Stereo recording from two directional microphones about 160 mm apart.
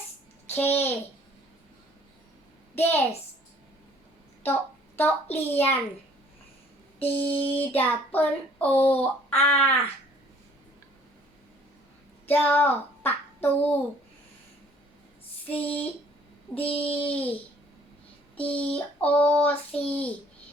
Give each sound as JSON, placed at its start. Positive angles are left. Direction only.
{"t": 0.5, "sound": "child singing", "side_deg": 15}
{"t": 2.7, "sound": "child singing", "side_deg": 15}
{"t": 4.9, "sound": "child singing", "side_deg": 10}
{"t": 7.0, "sound": "mantra", "side_deg": 35}
{"t": 7.6, "sound": "child singing", "side_deg": 10}
{"t": 12.3, "sound": "a child's voice", "side_deg": 10}
{"t": 15.4, "sound": "child singing", "side_deg": 10}
{"t": 16.6, "sound": "mantra", "side_deg": 35}
{"t": 17.0, "sound": "child singing", "side_deg": 10}
{"t": 18.5, "sound": "child singing", "side_deg": 10}